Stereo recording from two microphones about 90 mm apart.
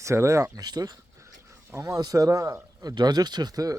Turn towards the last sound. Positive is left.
turn(degrees=-45)  # may be behind; listen again after turning